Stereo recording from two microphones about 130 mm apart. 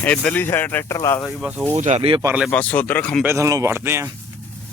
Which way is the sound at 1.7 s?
60° right (ahead or behind).